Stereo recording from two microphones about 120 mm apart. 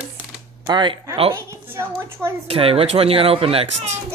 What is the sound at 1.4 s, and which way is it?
Speech, 20° right (ahead or behind).